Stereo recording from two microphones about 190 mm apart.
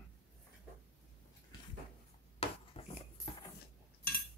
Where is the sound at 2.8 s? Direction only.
30° left (ahead or behind).